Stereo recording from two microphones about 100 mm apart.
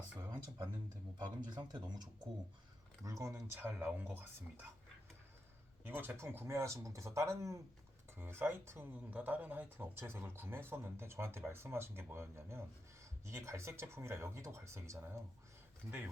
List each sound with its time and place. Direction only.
0.2 s speech: 40° right (ahead or behind)
3.0 s speech: 30° right (ahead or behind)
5.8 s speech: 20° right (ahead or behind)